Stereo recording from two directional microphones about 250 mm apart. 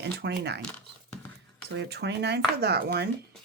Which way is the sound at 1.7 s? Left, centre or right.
Right.